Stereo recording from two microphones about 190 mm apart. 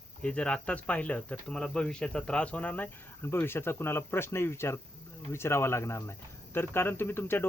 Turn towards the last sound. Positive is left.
turn(degrees=10)  # may be behind; listen again after turning